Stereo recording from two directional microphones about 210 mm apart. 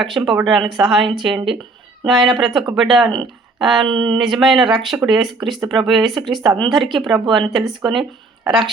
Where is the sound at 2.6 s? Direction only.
20° right (ahead or behind).